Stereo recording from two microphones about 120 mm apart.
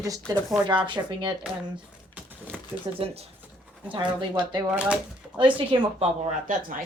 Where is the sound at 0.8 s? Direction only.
40° right (ahead or behind).